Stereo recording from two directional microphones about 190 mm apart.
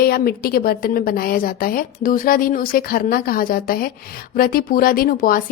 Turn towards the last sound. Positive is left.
turn(degrees=50)  # may be behind; listen again after turning